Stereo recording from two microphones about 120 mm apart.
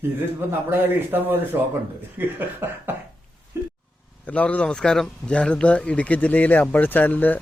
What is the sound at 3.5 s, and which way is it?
Vehicle, 20° right (ahead or behind).